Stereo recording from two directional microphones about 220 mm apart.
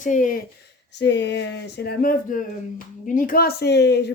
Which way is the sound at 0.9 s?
50° left (ahead or behind).